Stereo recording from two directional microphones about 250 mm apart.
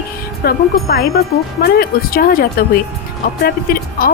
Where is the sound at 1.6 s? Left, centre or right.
Left.